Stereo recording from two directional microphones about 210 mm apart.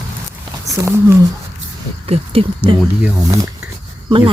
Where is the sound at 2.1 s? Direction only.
25° right (ahead or behind).